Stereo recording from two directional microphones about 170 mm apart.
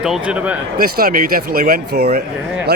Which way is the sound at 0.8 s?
60° right (ahead or behind).